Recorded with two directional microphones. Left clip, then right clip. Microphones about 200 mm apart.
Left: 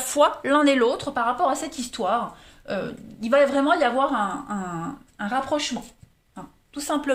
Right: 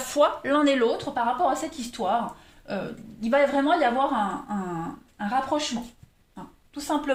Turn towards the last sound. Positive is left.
turn(degrees=45)  # may be behind; listen again after turning